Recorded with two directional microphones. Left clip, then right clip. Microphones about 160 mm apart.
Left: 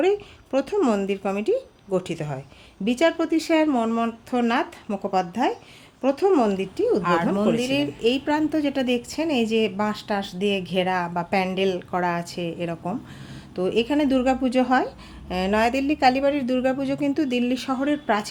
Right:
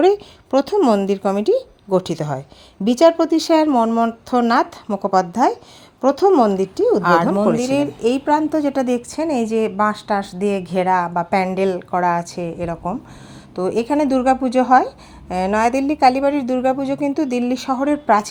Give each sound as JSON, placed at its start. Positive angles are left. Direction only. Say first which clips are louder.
{"t": 0.0, "sound": "speech", "louder": "right 7 dB", "side_deg": -40}
{"t": 7.3, "sound": "a woman's voice", "louder": "right 5 dB", "side_deg": -25}